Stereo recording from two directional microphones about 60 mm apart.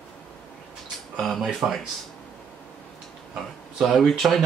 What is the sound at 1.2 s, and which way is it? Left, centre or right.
Speech, centre.